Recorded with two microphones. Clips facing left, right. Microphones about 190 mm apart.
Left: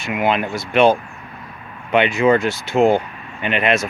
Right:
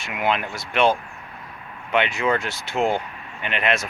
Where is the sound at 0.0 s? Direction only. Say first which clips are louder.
Left 5 dB; 10° left (ahead or behind).